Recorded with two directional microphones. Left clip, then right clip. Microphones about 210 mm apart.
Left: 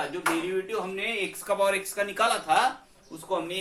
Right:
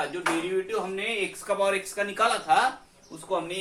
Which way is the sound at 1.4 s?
25° left (ahead or behind).